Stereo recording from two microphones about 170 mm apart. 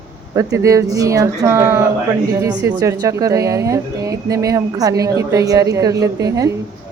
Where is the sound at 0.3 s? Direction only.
20° right (ahead or behind).